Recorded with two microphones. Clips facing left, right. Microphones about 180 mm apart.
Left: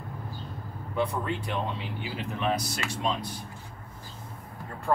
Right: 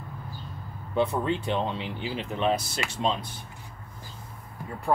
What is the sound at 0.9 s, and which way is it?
Speech, 25° right (ahead or behind).